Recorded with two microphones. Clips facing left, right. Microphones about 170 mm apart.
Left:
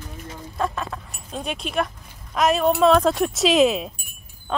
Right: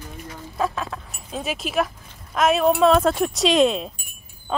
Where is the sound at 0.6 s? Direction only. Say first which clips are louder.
Right 1 dB; centre (ahead or behind).